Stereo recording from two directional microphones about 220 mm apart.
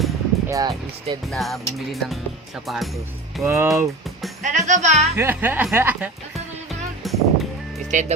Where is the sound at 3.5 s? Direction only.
15° right (ahead or behind).